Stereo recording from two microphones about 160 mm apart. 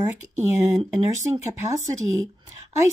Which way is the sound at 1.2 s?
20° right (ahead or behind).